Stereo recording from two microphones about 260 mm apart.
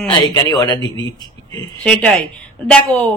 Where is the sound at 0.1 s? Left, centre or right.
Centre.